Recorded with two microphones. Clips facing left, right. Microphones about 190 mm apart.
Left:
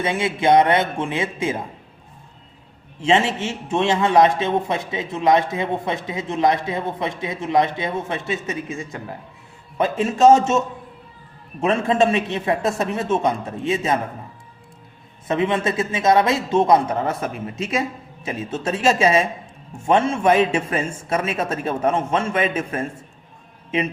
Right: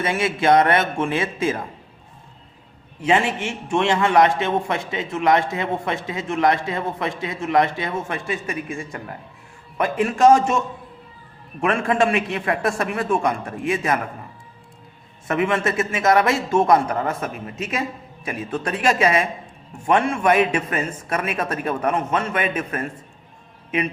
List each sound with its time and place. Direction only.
0.0 s a man's voice: 20° left (ahead or behind)
3.0 s a man's voice: 25° left (ahead or behind)
11.6 s a man's voice: 25° left (ahead or behind)
15.3 s a man's voice: 20° left (ahead or behind)